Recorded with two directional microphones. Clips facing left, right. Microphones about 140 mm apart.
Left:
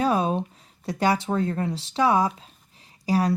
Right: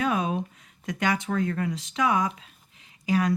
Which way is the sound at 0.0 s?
35° left (ahead or behind).